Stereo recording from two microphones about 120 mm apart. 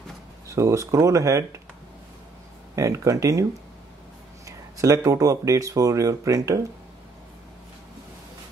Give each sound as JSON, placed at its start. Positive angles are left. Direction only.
{"t": 0.5, "sound": "speech", "side_deg": -25}
{"t": 2.7, "sound": "speech", "side_deg": -25}
{"t": 4.5, "sound": "speech", "side_deg": -30}